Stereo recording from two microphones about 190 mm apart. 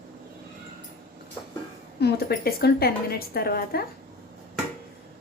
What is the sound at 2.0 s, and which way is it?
A woman's voice, 55° left (ahead or behind).